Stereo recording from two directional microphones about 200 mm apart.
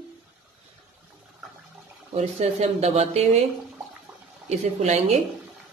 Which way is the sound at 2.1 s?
30° right (ahead or behind).